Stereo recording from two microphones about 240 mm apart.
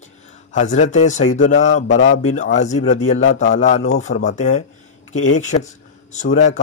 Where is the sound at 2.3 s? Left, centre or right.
Left.